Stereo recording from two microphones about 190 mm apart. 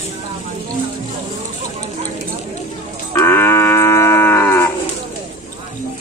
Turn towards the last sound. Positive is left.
turn(degrees=10)  # may be behind; listen again after turning